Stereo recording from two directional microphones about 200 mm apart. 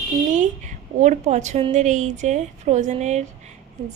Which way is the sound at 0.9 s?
35° right (ahead or behind).